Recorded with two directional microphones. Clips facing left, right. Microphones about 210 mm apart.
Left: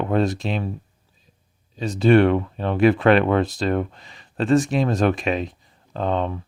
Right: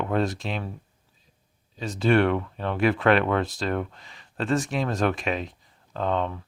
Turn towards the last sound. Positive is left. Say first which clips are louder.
# left 3 dB
turn(degrees=20)  # may be behind; listen again after turning